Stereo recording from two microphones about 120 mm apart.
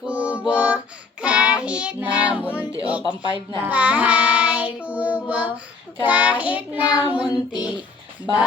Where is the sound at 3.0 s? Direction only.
40° left (ahead or behind).